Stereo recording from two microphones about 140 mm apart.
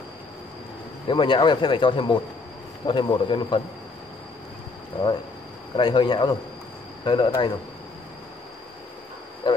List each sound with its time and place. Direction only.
1.0 s speech: 35° left (ahead or behind)
4.9 s speech: 40° left (ahead or behind)